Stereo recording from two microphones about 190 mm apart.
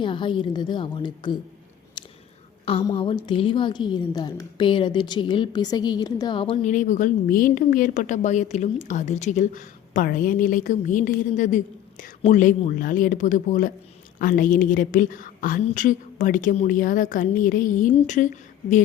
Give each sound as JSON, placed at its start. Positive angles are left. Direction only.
{"t": 0.0, "sound": "a woman's voice", "side_deg": 25}
{"t": 2.9, "sound": "a woman's voice", "side_deg": 25}
{"t": 6.7, "sound": "a woman's voice", "side_deg": 40}